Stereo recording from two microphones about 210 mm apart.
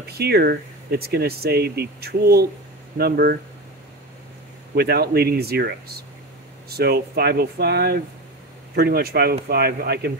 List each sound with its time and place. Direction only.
0.0 s speech: 50° right (ahead or behind)
4.7 s speech: 50° right (ahead or behind)